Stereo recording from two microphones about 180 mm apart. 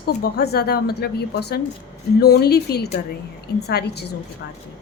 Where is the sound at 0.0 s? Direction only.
65° left (ahead or behind).